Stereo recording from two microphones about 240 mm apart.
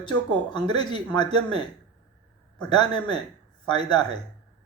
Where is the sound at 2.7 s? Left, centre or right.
Centre.